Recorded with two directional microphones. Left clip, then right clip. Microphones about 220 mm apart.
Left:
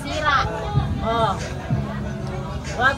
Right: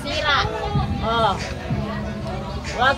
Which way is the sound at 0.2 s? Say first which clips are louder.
Even; 40° right (ahead or behind).